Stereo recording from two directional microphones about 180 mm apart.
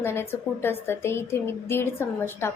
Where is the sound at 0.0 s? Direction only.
15° left (ahead or behind).